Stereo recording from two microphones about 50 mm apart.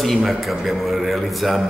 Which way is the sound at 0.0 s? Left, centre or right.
Centre.